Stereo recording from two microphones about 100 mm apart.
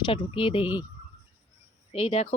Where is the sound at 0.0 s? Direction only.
60° left (ahead or behind).